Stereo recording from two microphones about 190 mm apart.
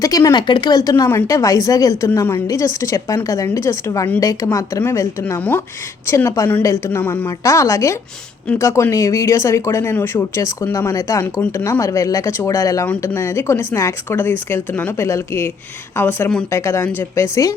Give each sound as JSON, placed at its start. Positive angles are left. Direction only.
{"t": 0.0, "sound": "speech", "side_deg": 15}